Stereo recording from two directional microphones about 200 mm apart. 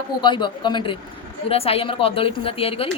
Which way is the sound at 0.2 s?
25° left (ahead or behind).